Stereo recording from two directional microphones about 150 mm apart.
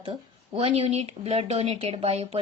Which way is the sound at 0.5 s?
40° right (ahead or behind).